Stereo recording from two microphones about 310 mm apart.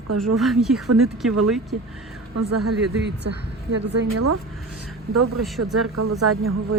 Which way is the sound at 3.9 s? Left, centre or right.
Right.